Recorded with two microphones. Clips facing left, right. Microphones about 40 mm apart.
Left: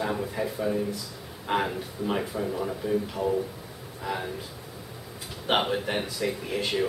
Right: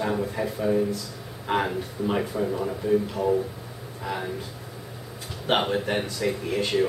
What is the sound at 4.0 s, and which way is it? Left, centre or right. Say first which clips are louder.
Speech: right 1 dB; centre.